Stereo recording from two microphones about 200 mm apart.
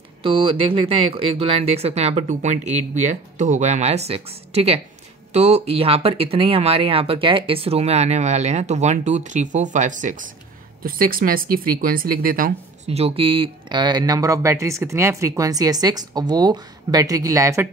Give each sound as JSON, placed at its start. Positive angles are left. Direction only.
{"t": 0.2, "sound": "speech", "side_deg": -25}
{"t": 12.8, "sound": "speech", "side_deg": -30}